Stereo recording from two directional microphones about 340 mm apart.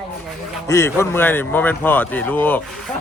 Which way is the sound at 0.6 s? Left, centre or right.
Centre.